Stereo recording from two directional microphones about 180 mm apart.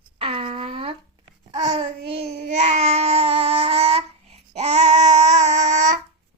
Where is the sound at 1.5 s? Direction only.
25° right (ahead or behind); by 5.9 s 40° right (ahead or behind).